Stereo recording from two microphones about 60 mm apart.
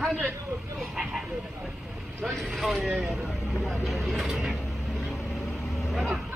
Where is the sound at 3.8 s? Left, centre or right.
Centre.